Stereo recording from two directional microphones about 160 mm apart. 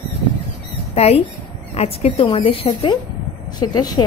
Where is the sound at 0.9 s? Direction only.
40° left (ahead or behind).